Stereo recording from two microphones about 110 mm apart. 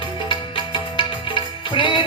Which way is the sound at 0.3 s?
50° left (ahead or behind).